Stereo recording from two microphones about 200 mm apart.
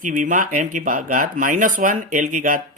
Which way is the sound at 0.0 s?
40° right (ahead or behind).